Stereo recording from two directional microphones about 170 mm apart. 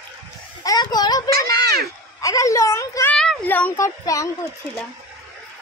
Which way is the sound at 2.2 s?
20° left (ahead or behind).